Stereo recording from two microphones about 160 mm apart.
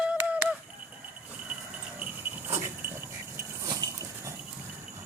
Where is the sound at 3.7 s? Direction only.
25° right (ahead or behind).